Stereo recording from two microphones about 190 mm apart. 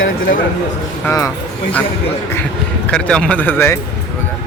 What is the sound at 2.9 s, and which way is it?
Speech, 5° left (ahead or behind).